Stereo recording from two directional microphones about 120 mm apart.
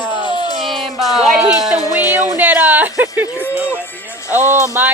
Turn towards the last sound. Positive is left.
turn(degrees=-15)  # may be behind; listen again after turning